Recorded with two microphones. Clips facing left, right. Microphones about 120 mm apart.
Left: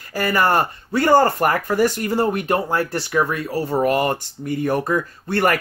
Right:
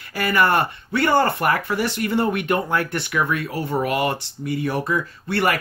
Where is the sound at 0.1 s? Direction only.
40° left (ahead or behind).